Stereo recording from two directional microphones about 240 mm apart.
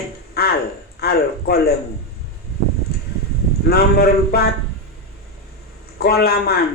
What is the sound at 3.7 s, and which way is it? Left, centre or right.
Speech, left.